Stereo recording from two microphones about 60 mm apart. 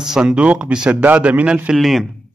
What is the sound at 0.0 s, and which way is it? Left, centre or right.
Speech, centre.